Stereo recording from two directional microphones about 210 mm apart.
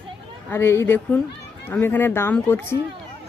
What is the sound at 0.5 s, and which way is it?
Speech, 10° left (ahead or behind).